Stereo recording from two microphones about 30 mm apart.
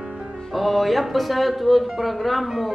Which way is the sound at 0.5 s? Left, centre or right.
Centre.